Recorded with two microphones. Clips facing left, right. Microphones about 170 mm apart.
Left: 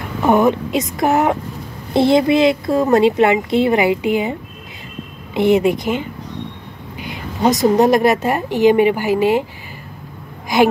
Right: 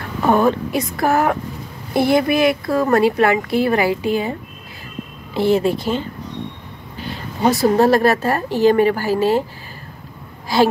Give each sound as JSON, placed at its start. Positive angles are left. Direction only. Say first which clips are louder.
{"t": 0.2, "sound": "a woman's voice", "louder": "left 2 dB", "side_deg": 20}
{"t": 7.0, "sound": "a sound", "louder": "left 1 dB", "side_deg": 15}
{"t": 7.6, "sound": "a woman's voice", "louder": "left 1 dB", "side_deg": 15}
{"t": 10.5, "sound": "speech", "louder": "left 2 dB", "side_deg": 20}